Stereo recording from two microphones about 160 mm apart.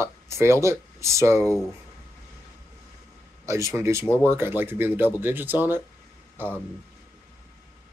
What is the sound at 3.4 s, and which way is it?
Speech, 20° right (ahead or behind).